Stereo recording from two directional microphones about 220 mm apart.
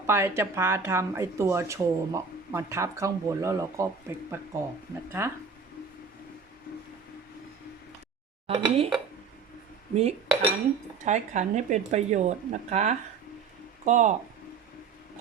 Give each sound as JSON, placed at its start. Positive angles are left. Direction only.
{"t": 0.1, "sound": "speech", "side_deg": -10}
{"t": 8.4, "sound": "speech", "side_deg": -25}
{"t": 10.0, "sound": "dishes", "side_deg": -30}
{"t": 11.0, "sound": "speech", "side_deg": -30}